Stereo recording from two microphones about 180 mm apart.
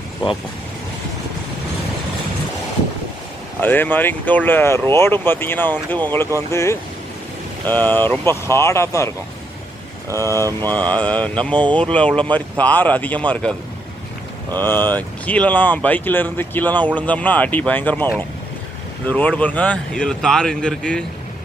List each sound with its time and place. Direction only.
3.6 s speech: 10° left (ahead or behind)
10.1 s speech: 15° right (ahead or behind)
10.7 s speech: 10° left (ahead or behind)
14.6 s speech: 10° left (ahead or behind)